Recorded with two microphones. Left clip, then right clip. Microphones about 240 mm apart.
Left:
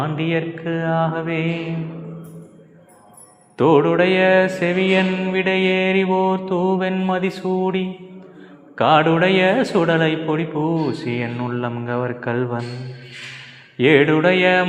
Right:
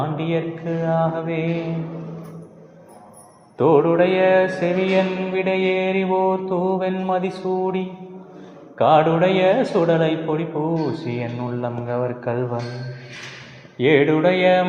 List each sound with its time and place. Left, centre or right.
0.0 s music: left
3.6 s music: left
13.7 s music: left